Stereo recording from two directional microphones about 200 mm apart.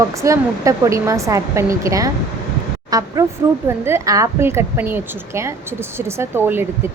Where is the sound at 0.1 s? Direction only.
15° right (ahead or behind).